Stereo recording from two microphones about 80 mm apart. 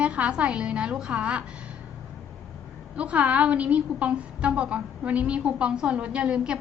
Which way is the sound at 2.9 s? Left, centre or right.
Centre.